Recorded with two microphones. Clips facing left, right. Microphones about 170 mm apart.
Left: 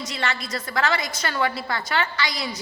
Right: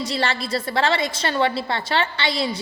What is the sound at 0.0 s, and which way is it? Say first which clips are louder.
A woman's voice: right 5 dB; 30° right (ahead or behind).